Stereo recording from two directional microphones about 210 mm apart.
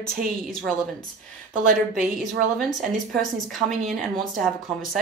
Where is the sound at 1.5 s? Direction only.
40° right (ahead or behind).